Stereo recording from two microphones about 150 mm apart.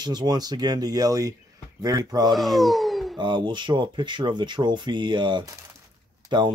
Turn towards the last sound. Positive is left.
turn(degrees=-30)  # may be behind; listen again after turning